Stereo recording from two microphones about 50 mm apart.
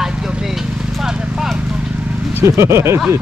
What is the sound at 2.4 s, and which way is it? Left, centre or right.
Speech, right.